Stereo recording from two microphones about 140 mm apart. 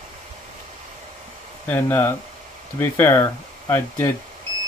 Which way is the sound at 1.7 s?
15° left (ahead or behind).